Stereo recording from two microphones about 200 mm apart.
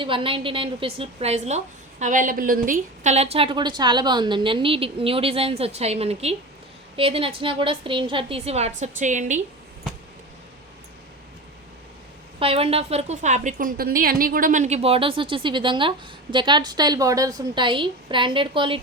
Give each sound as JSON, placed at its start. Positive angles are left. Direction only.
{"t": 0.0, "sound": "a woman's voice", "side_deg": -25}
{"t": 12.4, "sound": "a woman's voice", "side_deg": -30}